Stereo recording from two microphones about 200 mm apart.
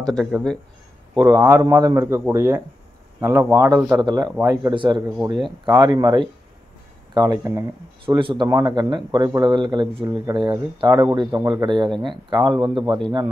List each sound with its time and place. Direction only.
0.1 s a man's voice: centre (ahead or behind)
1.1 s a man's voice: 20° right (ahead or behind)